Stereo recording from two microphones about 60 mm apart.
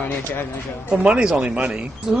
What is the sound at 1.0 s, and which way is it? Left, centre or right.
Speech, centre.